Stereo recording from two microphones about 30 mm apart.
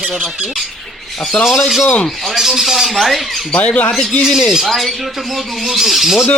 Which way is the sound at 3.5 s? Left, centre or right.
Left.